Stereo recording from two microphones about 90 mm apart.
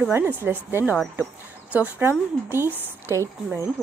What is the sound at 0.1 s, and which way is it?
Speech, 25° right (ahead or behind).